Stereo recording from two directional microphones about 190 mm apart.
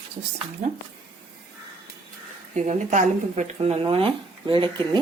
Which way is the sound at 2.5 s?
40° right (ahead or behind).